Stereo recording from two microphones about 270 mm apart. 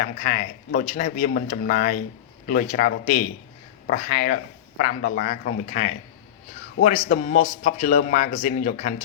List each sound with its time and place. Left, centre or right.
0.0 s speech: left